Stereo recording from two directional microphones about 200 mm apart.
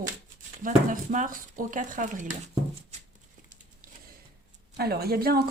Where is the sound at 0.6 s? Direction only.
40° right (ahead or behind).